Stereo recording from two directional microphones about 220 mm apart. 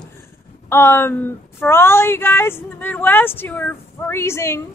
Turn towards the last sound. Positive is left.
turn(degrees=10)  # may be behind; listen again after turning